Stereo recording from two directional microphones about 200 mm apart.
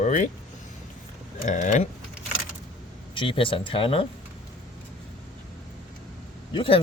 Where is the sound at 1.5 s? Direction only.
40° left (ahead or behind).